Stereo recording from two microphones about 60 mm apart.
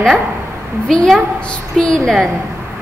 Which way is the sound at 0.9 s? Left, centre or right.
Centre.